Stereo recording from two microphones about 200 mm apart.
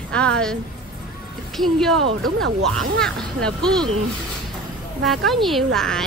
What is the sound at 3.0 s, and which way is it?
Speech, 5° left (ahead or behind).